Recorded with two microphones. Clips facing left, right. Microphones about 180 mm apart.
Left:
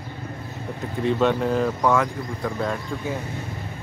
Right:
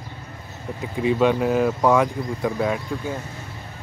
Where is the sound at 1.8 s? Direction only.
15° right (ahead or behind).